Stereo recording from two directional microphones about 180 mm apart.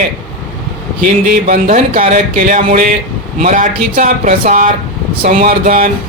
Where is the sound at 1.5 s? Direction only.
45° right (ahead or behind).